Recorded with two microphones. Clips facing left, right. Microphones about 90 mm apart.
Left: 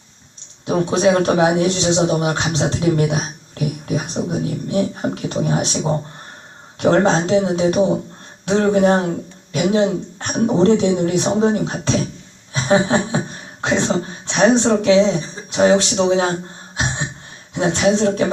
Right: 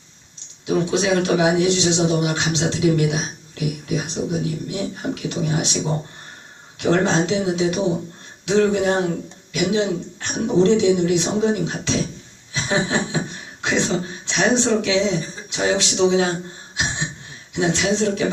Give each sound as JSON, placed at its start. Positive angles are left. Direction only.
{"t": 0.6, "sound": "speech", "side_deg": 40}
{"t": 17.5, "sound": "speech", "side_deg": 40}